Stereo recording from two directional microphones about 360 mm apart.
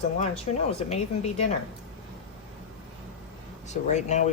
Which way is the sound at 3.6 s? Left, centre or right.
Centre.